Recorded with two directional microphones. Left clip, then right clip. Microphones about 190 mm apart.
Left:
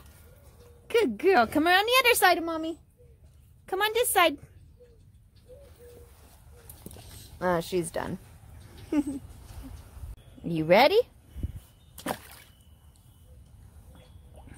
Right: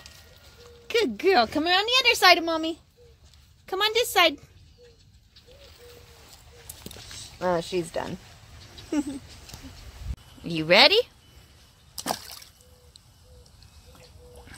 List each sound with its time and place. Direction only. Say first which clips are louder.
0.8 s speech: right 1 dB; centre (ahead or behind)
1.6 s speech: even; 20° left (ahead or behind)
2.1 s a woman's voice: right 5 dB; 5° right (ahead or behind)
2.4 s speech: right 5 dB; 15° right (ahead or behind)
3.6 s a woman's voice: right 2 dB; centre (ahead or behind)
7.3 s speech: right 1 dB; 5° right (ahead or behind)
10.4 s a woman's voice: right 3 dB; 5° left (ahead or behind)